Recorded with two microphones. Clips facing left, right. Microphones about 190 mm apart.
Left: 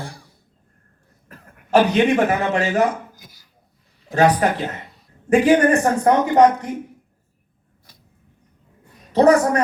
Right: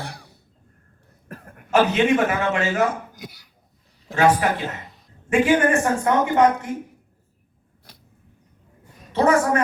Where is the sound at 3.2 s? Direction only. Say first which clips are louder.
Right 11 dB; 70° right (ahead or behind).